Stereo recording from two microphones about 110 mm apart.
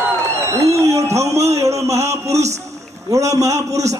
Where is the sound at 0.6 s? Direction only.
25° right (ahead or behind).